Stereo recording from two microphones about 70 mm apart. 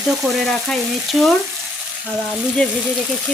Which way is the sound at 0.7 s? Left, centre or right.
Centre.